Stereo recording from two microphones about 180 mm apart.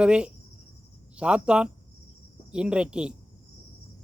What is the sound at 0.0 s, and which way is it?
Speech, 5° right (ahead or behind).